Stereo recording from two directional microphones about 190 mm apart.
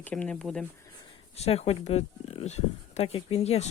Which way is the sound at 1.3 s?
35° left (ahead or behind).